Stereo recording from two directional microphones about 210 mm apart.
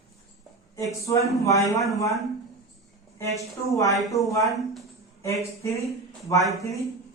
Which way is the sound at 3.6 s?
15° left (ahead or behind).